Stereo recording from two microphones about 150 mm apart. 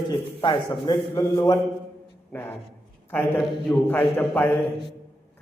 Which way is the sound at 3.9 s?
10° left (ahead or behind).